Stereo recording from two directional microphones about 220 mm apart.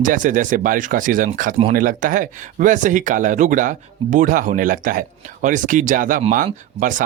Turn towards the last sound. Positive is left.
turn(degrees=-35)  # may be behind; listen again after turning